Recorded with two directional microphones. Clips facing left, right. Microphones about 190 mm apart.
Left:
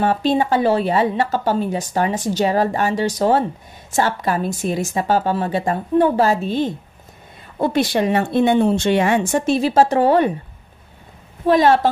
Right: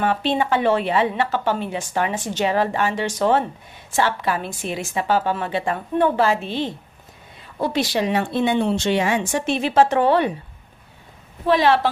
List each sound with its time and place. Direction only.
0.0 s a woman's voice: 40° left (ahead or behind)
9.5 s speech: 40° left (ahead or behind)
11.4 s a woman's voice: 45° left (ahead or behind)